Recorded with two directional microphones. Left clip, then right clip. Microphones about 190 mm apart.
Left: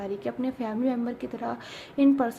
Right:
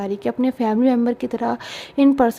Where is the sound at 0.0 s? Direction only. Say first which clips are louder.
Right 9 dB; 50° right (ahead or behind).